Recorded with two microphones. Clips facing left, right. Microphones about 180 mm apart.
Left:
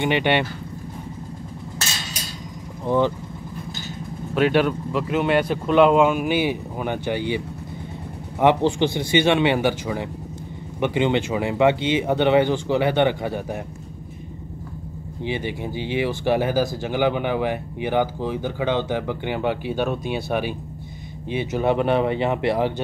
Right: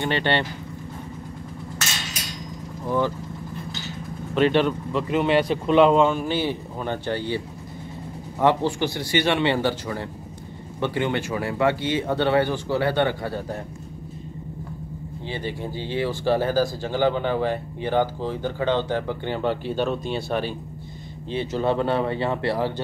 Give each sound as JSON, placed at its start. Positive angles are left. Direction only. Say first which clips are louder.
{"t": 0.0, "sound": "speech", "louder": "left 3 dB", "side_deg": 15}
{"t": 4.4, "sound": "speech", "louder": "left 1 dB", "side_deg": 5}
{"t": 15.2, "sound": "speech", "louder": "left 4 dB", "side_deg": 15}